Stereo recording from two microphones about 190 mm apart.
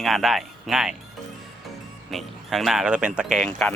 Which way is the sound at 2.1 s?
Centre (ahead or behind).